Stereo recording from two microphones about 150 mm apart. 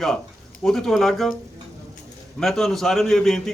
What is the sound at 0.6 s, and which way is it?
Speech, 5° left (ahead or behind).